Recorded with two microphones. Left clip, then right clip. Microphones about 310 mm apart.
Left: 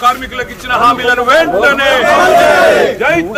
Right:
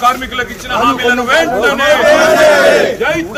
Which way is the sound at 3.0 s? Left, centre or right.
Centre.